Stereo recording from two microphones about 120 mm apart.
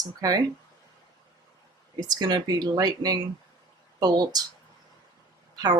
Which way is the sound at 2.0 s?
35° right (ahead or behind).